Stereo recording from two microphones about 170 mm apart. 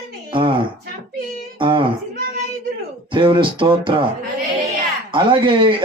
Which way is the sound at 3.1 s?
30° right (ahead or behind).